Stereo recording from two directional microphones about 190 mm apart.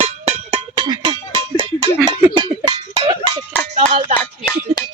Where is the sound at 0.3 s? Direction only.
30° right (ahead or behind).